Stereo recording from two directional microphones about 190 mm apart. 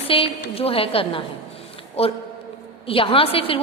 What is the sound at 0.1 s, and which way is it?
A woman's voice, 30° left (ahead or behind).